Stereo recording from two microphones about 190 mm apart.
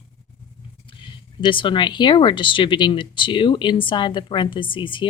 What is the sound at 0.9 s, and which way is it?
Speech, 25° left (ahead or behind).